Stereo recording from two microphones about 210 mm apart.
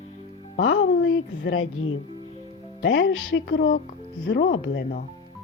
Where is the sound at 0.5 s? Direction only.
80° left; by 5.0 s 50° left (ahead or behind).